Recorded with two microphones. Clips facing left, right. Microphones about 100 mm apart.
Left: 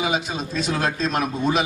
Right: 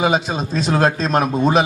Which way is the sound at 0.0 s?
40° right (ahead or behind).